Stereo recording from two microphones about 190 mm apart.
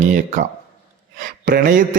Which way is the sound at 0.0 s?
40° right (ahead or behind).